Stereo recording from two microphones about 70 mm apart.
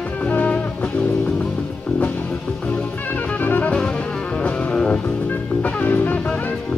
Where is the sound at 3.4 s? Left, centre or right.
Left.